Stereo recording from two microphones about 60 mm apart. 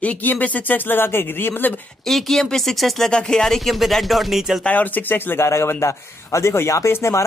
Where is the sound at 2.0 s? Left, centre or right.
Centre.